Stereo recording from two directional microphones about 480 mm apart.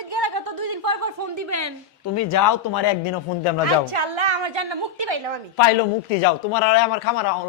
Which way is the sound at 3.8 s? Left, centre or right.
Right.